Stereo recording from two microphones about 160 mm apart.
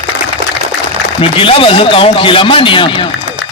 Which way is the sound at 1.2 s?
35° left (ahead or behind).